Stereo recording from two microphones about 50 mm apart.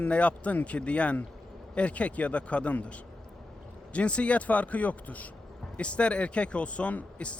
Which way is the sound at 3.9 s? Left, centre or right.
Left.